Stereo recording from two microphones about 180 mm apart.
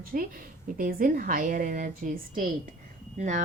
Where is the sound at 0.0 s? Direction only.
50° right (ahead or behind).